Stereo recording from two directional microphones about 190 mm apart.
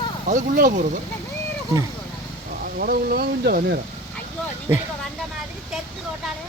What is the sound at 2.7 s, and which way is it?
Speech, 55° right (ahead or behind).